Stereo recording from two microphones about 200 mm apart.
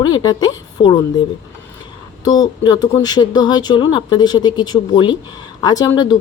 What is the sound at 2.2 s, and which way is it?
Speech, 20° left (ahead or behind).